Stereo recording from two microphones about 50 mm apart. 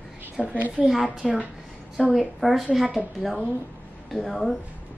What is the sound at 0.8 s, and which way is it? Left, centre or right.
Speech, centre.